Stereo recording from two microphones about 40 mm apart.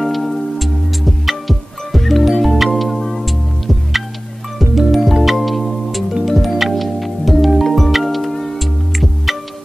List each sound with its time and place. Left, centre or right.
0.0 s music: centre